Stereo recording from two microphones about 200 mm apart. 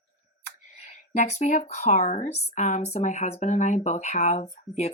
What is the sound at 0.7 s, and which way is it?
Speech, 35° left (ahead or behind).